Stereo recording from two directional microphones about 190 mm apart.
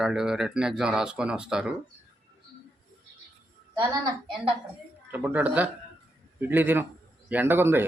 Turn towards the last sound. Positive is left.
turn(degrees=-10)  # may be behind; listen again after turning